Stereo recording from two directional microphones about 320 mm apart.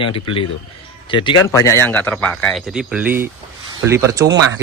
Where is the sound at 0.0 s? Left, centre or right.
Centre.